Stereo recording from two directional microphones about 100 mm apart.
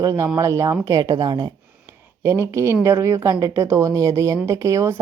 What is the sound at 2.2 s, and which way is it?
Speech, 30° right (ahead or behind).